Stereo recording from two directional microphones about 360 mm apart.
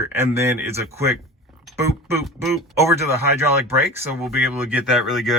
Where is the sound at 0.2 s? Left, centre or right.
Centre.